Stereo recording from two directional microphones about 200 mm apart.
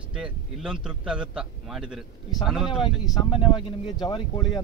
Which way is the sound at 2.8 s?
25° left (ahead or behind).